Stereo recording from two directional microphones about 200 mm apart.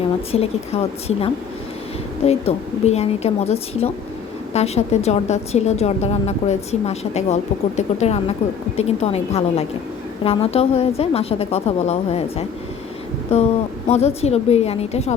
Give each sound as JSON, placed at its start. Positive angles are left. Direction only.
{"t": 0.3, "sound": "a woman's voice", "side_deg": 30}
{"t": 13.8, "sound": "a woman's voice", "side_deg": 30}